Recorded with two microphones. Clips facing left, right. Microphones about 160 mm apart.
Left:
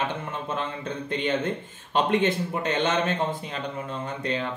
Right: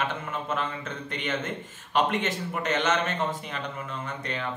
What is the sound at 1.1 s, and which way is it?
A man's voice, 30° left (ahead or behind).